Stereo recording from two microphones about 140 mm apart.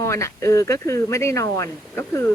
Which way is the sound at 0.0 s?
20° left (ahead or behind).